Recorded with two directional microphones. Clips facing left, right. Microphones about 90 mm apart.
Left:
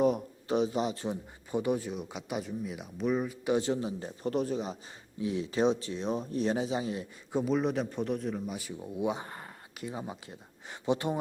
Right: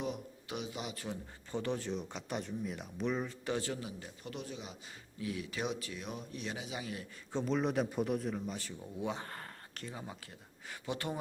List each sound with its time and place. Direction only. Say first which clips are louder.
0.0 s speech: left 12 dB; 40° left (ahead or behind)
1.0 s speech: left 7 dB; 15° left (ahead or behind); by 4.8 s 40° left (ahead or behind)
5.2 s speech: left 10 dB; 25° left (ahead or behind)
7.3 s a man's voice: left 4 dB; 5° left (ahead or behind)
8.5 s speech: left 6 dB; 15° left (ahead or behind)